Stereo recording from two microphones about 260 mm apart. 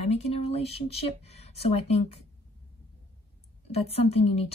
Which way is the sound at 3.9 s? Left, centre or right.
Left.